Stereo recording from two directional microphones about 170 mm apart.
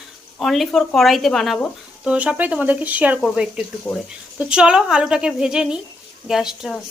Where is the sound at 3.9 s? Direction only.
20° left (ahead or behind).